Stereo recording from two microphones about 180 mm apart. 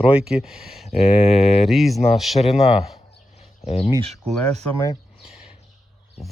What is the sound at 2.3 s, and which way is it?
Speech, 35° left (ahead or behind).